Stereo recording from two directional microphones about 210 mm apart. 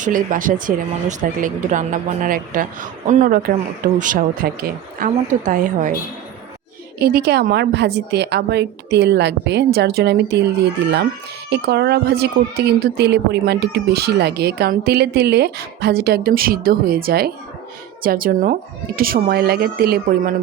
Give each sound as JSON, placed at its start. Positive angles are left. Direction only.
{"t": 0.0, "sound": "speech", "side_deg": -40}
{"t": 7.0, "sound": "speech", "side_deg": -50}
{"t": 11.4, "sound": "speech", "side_deg": -50}